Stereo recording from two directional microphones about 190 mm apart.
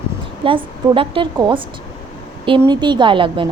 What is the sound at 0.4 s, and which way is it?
A woman's voice, 25° right (ahead or behind).